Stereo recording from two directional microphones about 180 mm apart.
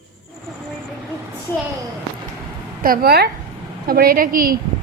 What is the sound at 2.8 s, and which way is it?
A woman's voice, 55° right (ahead or behind).